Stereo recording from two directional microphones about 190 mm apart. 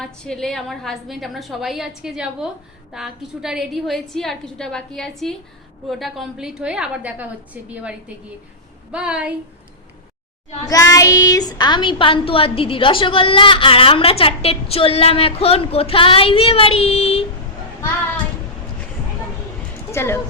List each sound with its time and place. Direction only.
0.0 s a woman's voice: 5° left (ahead or behind)
10.9 s a woman's voice: 20° left (ahead or behind)
19.9 s a woman's voice: 15° left (ahead or behind)